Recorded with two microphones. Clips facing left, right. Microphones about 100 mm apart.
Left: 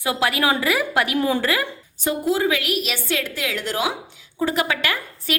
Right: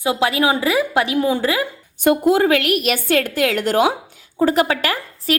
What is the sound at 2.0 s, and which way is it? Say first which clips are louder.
A woman's voice: right 6 dB; 55° right (ahead or behind).